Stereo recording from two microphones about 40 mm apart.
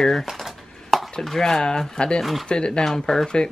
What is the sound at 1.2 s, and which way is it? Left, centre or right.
Speech, centre.